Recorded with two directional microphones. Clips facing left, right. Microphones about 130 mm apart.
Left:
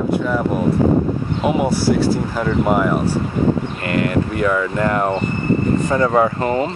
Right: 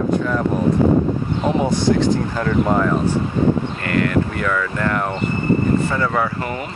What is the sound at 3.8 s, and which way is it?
Speech, 25° left (ahead or behind).